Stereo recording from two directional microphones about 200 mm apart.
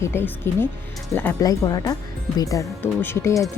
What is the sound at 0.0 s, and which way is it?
Speech, 10° left (ahead or behind).